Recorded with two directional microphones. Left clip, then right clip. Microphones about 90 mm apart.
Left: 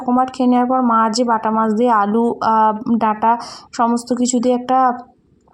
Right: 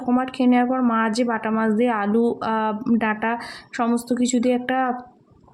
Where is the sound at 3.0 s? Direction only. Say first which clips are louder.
Left 13 dB; 35° left (ahead or behind).